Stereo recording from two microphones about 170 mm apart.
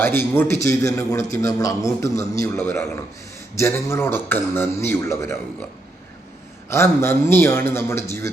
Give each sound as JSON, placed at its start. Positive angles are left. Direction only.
{"t": 0.0, "sound": "a man's voice", "side_deg": 15}
{"t": 6.7, "sound": "a man's voice", "side_deg": 15}